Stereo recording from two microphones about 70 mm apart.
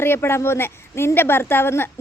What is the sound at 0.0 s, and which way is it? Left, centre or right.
A woman's voice, left.